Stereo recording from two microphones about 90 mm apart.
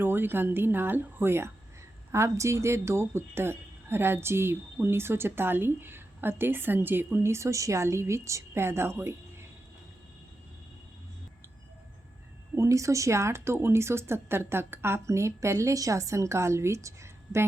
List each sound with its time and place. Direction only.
0.0 s speech: 25° right (ahead or behind)
12.5 s speech: 35° right (ahead or behind)